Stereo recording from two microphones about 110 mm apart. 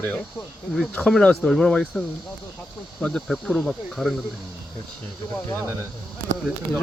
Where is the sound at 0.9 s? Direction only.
10° left (ahead or behind).